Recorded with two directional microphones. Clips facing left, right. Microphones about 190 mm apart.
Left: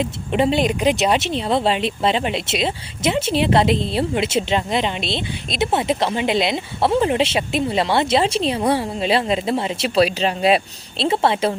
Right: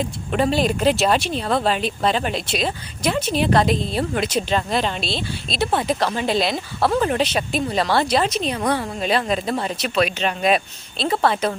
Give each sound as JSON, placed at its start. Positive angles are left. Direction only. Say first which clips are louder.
{"t": 0.0, "sound": "speech", "louder": "left 2 dB", "side_deg": 20}